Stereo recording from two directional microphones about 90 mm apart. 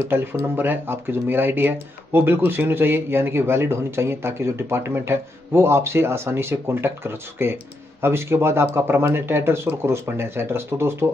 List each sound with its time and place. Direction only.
0.1 s speech: 25° right (ahead or behind)